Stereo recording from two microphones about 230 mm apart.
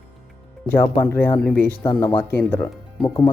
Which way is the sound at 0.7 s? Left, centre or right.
Centre.